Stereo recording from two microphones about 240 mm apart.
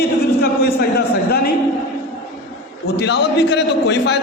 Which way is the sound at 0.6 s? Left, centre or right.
Left.